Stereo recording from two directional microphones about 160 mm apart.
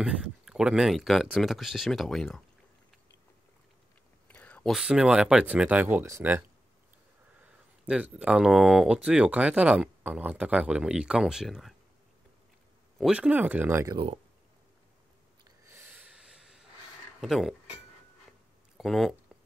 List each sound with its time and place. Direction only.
0.0 s speech: 5° right (ahead or behind)
4.3 s speech: 10° left (ahead or behind); by 6.4 s 15° right (ahead or behind)
7.4 s speech: 10° right (ahead or behind)
12.9 s speech: 5° right (ahead or behind)
13.9 s speech: 35° right (ahead or behind)
15.6 s snort: 15° right (ahead or behind)
17.2 s speech: centre (ahead or behind)
18.8 s speech: centre (ahead or behind)